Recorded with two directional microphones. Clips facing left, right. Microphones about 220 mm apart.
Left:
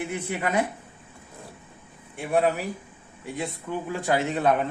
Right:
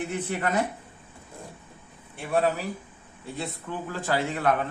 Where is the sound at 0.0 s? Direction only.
10° left (ahead or behind).